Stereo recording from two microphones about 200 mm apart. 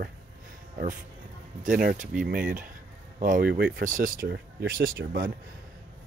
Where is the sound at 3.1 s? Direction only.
40° right (ahead or behind).